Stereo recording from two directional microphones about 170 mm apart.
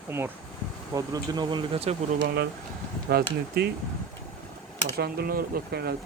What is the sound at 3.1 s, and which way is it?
Speech, 70° right (ahead or behind).